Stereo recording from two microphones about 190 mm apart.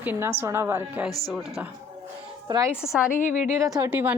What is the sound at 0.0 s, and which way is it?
A woman's voice, 10° right (ahead or behind).